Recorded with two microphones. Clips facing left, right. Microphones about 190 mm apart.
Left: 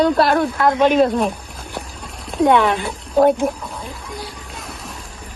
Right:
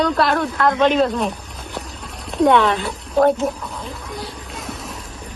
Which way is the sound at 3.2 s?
10° left (ahead or behind).